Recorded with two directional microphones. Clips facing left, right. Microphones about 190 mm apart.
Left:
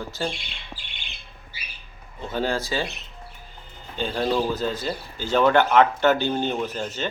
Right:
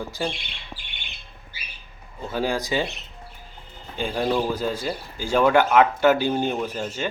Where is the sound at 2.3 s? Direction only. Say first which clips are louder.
Right 1 dB; 10° right (ahead or behind).